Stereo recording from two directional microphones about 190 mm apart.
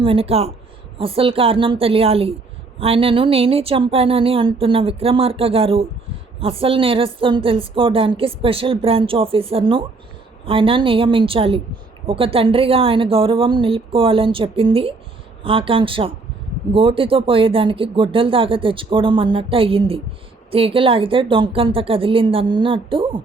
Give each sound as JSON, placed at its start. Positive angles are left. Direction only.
{"t": 0.0, "sound": "a woman's voice", "side_deg": -30}